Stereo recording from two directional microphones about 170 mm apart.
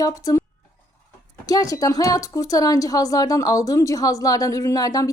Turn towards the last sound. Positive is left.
turn(degrees=20)  # may be behind; listen again after turning